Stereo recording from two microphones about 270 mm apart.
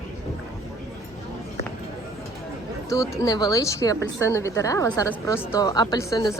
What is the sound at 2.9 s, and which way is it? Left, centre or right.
A woman's voice, centre.